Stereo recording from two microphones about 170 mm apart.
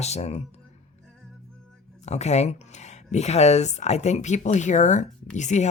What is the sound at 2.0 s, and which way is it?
Speech, 40° left (ahead or behind).